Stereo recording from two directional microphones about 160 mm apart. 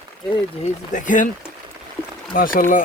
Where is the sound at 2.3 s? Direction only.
60° left (ahead or behind).